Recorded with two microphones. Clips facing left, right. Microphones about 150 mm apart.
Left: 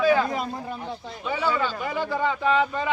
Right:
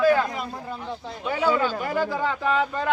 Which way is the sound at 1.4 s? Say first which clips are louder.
Right 4 dB; 10° right (ahead or behind).